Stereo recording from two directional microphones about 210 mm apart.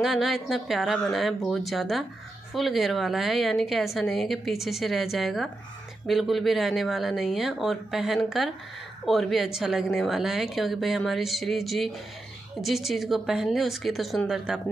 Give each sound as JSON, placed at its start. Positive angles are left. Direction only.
{"t": 0.0, "sound": "a woman's voice", "side_deg": 0}